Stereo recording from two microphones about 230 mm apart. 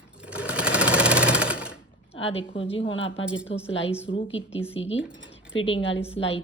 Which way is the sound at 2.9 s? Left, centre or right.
Left.